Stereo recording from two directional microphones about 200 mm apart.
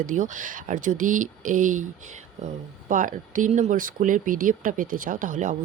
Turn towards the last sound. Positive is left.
turn(degrees=-40)  # may be behind; listen again after turning